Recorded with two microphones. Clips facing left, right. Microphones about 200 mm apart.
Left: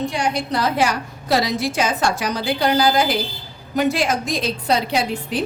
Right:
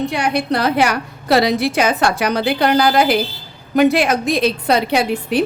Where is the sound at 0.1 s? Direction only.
60° right (ahead or behind).